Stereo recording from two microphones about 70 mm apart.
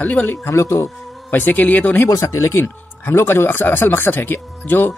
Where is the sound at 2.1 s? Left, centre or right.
Left.